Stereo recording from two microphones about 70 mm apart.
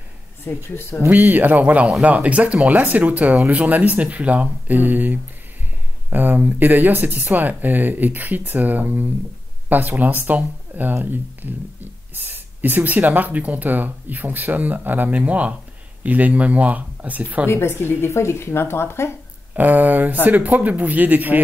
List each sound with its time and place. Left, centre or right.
0.7 s speech: left
1.1 s speech: right
17.5 s speech: left
19.5 s speech: right